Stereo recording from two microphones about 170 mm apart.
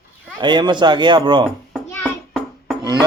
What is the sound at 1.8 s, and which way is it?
Music, 10° left (ahead or behind).